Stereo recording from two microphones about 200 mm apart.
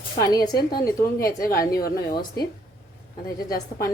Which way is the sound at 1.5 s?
50° left (ahead or behind).